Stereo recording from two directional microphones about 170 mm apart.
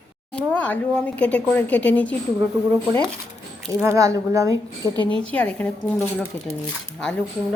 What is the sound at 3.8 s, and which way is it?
A woman's voice, 15° right (ahead or behind).